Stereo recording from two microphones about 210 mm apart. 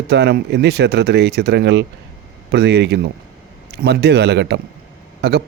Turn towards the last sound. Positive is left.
turn(degrees=-50)  # may be behind; listen again after turning